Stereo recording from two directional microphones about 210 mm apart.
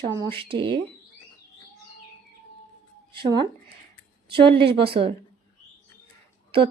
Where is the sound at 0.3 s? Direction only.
25° right (ahead or behind).